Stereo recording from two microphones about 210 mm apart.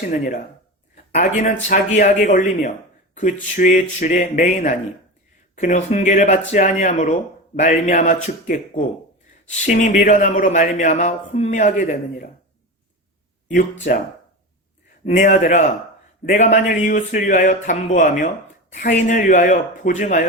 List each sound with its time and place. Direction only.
0.0 s speech: 40° left (ahead or behind)
13.5 s speech: 40° left (ahead or behind)
15.0 s speech: 35° left (ahead or behind)